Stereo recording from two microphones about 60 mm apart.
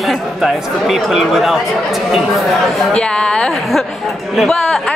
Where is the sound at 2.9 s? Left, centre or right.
Centre.